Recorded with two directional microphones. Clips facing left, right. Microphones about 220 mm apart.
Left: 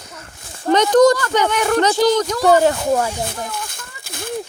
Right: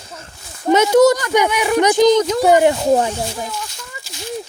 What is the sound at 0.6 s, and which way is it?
Speech, 10° right (ahead or behind).